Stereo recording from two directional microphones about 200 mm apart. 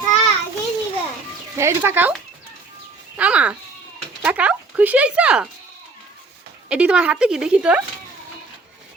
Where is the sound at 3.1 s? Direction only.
5° right (ahead or behind).